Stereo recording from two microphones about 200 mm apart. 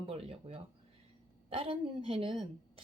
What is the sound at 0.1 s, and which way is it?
Speech, 30° right (ahead or behind).